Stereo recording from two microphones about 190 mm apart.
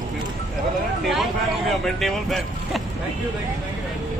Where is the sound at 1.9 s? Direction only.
Centre (ahead or behind).